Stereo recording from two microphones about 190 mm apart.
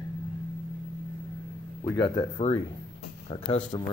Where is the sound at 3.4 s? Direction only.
25° left (ahead or behind).